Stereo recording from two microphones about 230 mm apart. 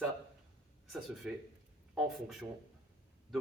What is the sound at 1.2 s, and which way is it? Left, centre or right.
Speech, centre.